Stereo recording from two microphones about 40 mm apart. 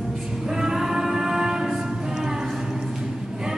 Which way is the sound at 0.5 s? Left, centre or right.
Centre.